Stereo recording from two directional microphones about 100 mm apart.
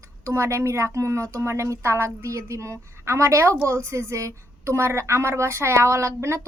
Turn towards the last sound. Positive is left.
turn(degrees=-30)  # may be behind; listen again after turning